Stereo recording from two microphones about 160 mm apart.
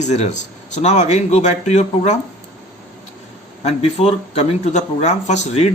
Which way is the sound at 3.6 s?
40° left (ahead or behind).